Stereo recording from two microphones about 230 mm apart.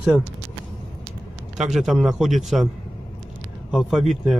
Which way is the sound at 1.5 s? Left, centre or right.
Centre.